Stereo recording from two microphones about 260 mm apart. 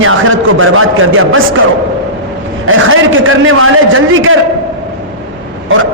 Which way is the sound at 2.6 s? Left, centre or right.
Right.